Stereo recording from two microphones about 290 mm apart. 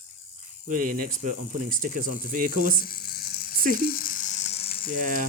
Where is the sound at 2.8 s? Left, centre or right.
Left.